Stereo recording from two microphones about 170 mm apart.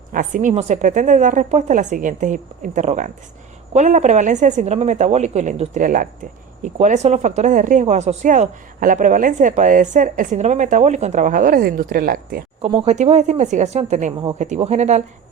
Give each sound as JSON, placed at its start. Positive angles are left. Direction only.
{"t": 0.1, "sound": "speech", "side_deg": -50}
{"t": 12.6, "sound": "speech", "side_deg": -35}